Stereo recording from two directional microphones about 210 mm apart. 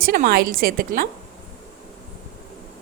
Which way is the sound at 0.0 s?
45° right (ahead or behind).